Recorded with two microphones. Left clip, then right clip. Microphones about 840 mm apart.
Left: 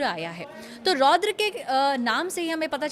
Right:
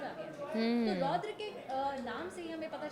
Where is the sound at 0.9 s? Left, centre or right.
Left.